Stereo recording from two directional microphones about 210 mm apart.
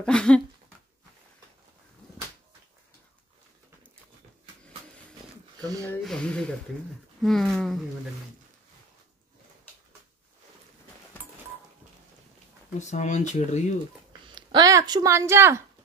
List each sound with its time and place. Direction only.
0.0 s speech: 5° left (ahead or behind)
5.6 s sniff: 15° right (ahead or behind)
5.9 s speech: 5° left (ahead or behind)
12.7 s speech: 35° left (ahead or behind)
14.2 s speech: 20° right (ahead or behind)